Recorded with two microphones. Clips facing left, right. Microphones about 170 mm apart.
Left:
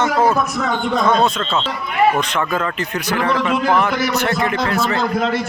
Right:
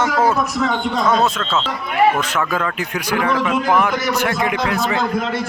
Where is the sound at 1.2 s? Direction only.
5° right (ahead or behind).